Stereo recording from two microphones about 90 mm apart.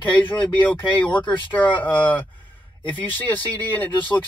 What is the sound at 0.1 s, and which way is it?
Speech, 20° left (ahead or behind).